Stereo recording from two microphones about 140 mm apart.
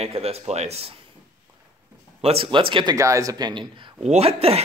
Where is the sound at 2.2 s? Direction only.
45° right (ahead or behind).